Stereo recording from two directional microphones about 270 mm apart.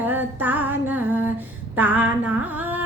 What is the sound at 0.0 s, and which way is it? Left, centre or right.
Female singing, centre.